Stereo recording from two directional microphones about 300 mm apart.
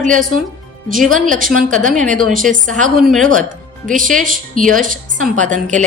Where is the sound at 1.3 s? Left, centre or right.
Right.